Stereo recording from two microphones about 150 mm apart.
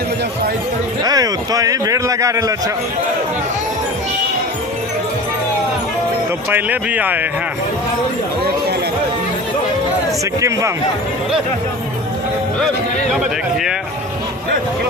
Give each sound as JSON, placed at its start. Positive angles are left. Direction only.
{"t": 1.0, "sound": "a man's voice", "side_deg": -25}
{"t": 6.5, "sound": "speech", "side_deg": -10}